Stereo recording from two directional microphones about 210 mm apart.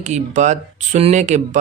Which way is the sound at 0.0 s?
35° right (ahead or behind).